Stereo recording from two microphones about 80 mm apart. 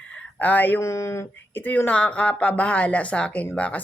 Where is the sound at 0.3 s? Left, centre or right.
Left.